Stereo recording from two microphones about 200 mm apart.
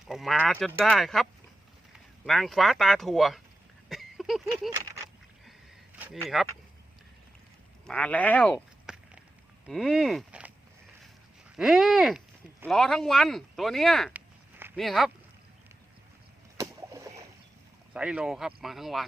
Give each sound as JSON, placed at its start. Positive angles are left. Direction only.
{"t": 0.1, "sound": "speech", "side_deg": 0}
{"t": 3.8, "sound": "a sound", "side_deg": 0}
{"t": 6.2, "sound": "speech", "side_deg": 0}
{"t": 7.9, "sound": "a sound", "side_deg": 5}
{"t": 9.6, "sound": "speech", "side_deg": 0}
{"t": 11.5, "sound": "speech", "side_deg": 0}
{"t": 16.6, "sound": "rowboat", "side_deg": -15}
{"t": 17.9, "sound": "speech", "side_deg": -5}